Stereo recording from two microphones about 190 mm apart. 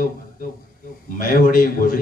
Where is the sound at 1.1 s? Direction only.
50° left (ahead or behind).